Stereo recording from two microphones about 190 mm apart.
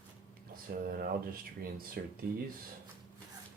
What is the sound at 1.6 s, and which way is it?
Speech, 50° right (ahead or behind).